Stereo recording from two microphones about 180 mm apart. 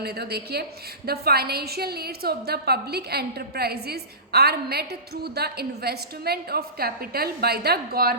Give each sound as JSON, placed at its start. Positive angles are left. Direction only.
{"t": 0.0, "sound": "a woman's voice", "side_deg": -65}